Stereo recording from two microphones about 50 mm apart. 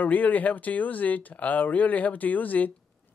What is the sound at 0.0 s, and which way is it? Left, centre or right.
Speech, left.